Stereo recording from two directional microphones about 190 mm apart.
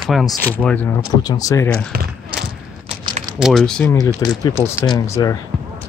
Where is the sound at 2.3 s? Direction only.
5° right (ahead or behind).